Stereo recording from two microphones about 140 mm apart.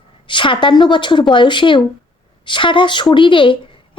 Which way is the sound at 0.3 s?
35° left (ahead or behind).